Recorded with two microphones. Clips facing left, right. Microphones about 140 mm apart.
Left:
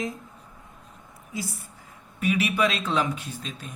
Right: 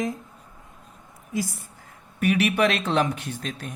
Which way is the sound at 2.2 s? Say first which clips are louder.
Right 3 dB; 65° right (ahead or behind).